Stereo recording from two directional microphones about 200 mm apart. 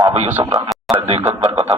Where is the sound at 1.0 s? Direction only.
30° right (ahead or behind).